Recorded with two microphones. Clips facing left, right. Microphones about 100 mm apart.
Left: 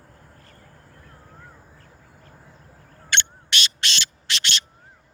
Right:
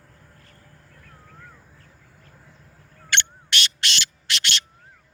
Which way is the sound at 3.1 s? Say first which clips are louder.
Even; 20° left (ahead or behind).